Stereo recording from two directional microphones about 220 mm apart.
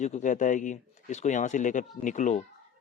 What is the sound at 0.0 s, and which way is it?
Speech, 35° left (ahead or behind).